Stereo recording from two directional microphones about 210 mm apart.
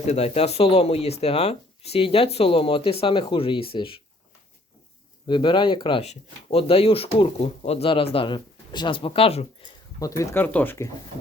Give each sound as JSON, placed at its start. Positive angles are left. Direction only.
{"t": 0.0, "sound": "speech", "side_deg": 30}
{"t": 5.3, "sound": "speech", "side_deg": 20}
{"t": 10.0, "sound": "speech", "side_deg": 15}